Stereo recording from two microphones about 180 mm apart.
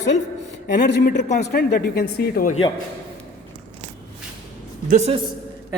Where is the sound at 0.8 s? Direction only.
70° left (ahead or behind).